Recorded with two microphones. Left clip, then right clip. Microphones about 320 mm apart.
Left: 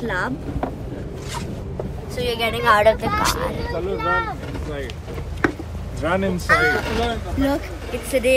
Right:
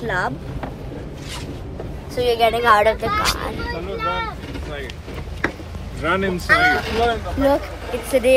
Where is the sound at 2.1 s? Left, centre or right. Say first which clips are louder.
Right 6 dB; centre.